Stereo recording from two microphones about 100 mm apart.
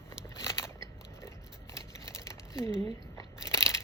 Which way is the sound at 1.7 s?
30° left (ahead or behind).